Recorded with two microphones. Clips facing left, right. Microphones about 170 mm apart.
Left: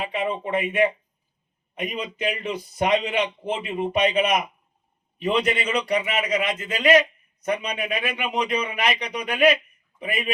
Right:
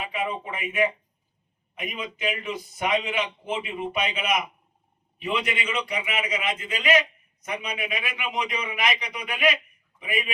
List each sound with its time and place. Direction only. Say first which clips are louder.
0.0 s a man's voice: left 4 dB; 35° left (ahead or behind)